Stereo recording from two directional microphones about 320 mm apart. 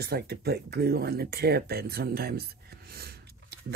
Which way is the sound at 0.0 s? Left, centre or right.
Right.